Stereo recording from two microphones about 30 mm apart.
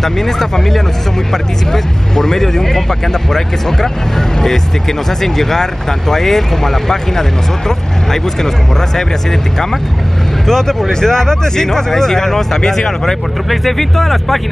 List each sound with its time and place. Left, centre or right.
0.0 s speech: centre